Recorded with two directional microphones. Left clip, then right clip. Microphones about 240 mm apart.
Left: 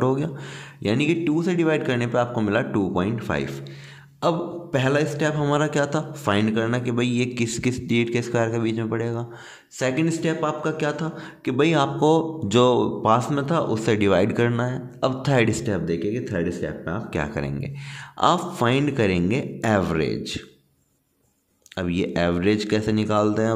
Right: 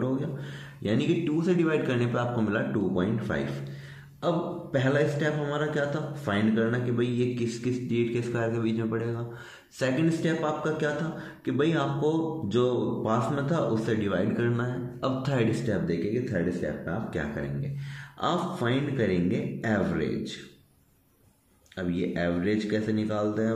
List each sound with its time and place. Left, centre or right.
0.8 s a man's voice: left
21.7 s a man's voice: left